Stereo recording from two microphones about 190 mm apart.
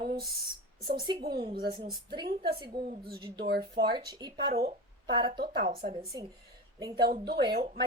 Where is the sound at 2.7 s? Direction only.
50° right (ahead or behind).